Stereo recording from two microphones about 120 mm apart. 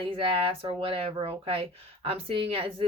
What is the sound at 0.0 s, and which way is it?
Speech, 50° right (ahead or behind).